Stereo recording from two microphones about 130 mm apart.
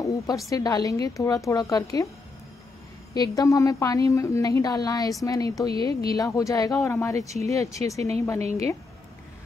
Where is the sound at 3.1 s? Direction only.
30° left (ahead or behind).